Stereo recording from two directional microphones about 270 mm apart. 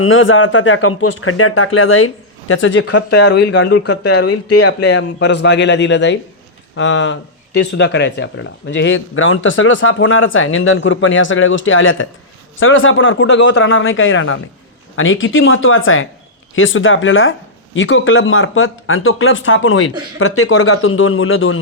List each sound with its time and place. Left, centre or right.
0.0 s speech: left
4.2 s speech: left
4.6 s a man's voice: left